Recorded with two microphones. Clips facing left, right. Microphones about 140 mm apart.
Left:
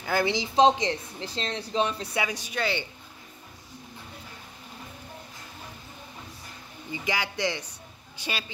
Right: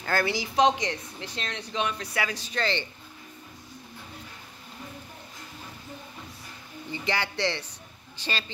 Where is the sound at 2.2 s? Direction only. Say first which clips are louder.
Left 1 dB; 15° left (ahead or behind).